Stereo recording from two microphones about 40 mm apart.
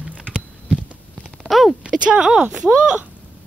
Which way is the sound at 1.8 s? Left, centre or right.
Right.